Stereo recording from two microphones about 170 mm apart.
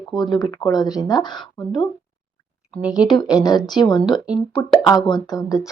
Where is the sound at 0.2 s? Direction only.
25° left (ahead or behind).